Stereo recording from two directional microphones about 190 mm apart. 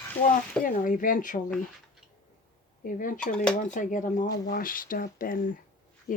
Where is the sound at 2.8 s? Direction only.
45° left (ahead or behind).